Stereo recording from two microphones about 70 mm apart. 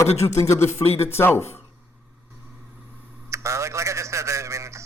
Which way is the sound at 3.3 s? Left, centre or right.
Right.